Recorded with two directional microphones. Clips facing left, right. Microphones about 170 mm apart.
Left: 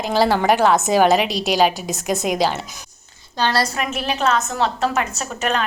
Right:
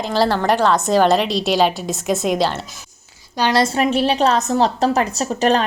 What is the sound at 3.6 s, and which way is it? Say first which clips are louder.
A woman's voice: right 7 dB; 30° right (ahead or behind).